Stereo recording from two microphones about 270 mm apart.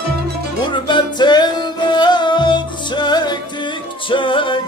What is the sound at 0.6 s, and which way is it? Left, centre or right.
Music, centre.